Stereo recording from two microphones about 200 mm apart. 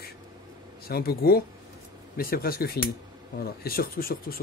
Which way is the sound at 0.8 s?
50° left (ahead or behind).